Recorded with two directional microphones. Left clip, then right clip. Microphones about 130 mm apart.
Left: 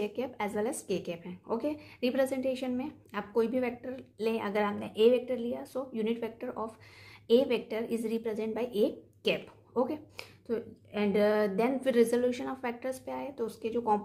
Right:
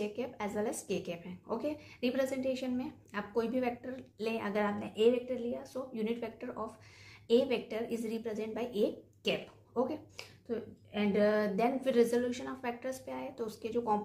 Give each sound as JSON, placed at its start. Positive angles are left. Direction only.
{"t": 0.0, "sound": "a woman's voice", "side_deg": 30}